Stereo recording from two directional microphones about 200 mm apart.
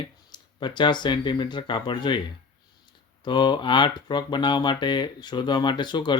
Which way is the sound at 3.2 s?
25° left (ahead or behind).